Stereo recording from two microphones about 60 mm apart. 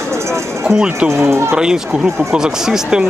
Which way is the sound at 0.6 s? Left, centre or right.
Centre.